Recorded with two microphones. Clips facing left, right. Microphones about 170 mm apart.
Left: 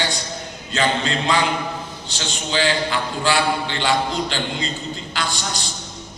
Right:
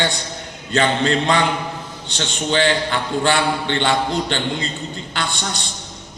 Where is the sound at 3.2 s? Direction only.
60° right (ahead or behind).